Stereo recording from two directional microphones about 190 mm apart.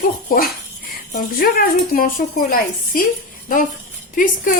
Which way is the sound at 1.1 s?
50° left (ahead or behind).